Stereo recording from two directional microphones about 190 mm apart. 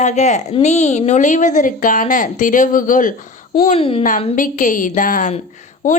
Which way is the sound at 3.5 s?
30° left (ahead or behind).